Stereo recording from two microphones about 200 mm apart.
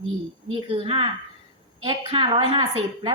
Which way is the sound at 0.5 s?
30° right (ahead or behind).